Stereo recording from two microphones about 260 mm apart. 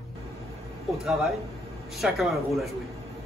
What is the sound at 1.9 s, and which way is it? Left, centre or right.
Speech, centre.